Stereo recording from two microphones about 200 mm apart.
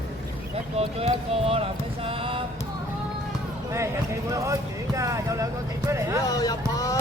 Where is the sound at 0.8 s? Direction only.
30° right (ahead or behind).